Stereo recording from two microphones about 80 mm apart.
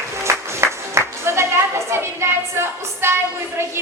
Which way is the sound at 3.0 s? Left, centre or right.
Right.